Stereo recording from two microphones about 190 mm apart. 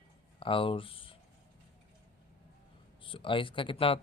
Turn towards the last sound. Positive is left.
turn(degrees=30)  # may be behind; listen again after turning